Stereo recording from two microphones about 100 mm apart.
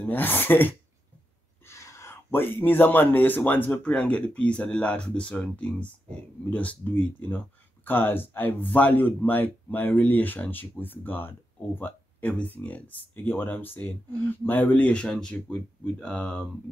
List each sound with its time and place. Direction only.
0.1 s speech: 20° left (ahead or behind)